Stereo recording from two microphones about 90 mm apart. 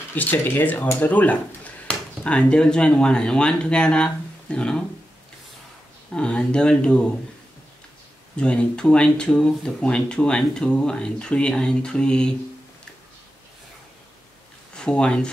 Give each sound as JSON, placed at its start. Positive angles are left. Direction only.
{"t": 0.1, "sound": "speech", "side_deg": 20}
{"t": 6.1, "sound": "speech", "side_deg": 10}
{"t": 8.4, "sound": "speech", "side_deg": 10}
{"t": 14.8, "sound": "speech", "side_deg": 10}